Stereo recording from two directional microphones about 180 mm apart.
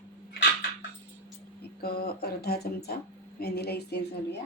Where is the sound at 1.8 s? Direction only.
60° left (ahead or behind).